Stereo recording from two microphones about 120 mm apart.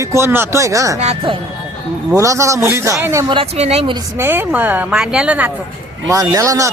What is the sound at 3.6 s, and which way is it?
Speech, 65° right (ahead or behind).